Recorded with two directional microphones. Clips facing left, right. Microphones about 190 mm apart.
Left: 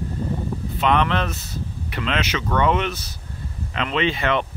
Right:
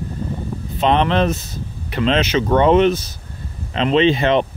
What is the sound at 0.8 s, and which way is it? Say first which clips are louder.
Speech: right 5 dB; 25° right (ahead or behind).